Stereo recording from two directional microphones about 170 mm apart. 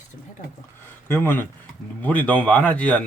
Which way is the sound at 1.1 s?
10° left (ahead or behind).